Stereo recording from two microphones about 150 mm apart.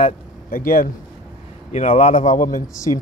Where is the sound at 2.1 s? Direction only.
60° left (ahead or behind).